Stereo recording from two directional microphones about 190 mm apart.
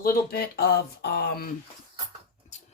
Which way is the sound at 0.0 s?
50° left (ahead or behind).